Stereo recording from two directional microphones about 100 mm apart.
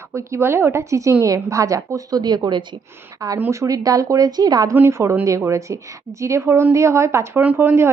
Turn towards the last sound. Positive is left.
turn(degrees=-20)  # may be behind; listen again after turning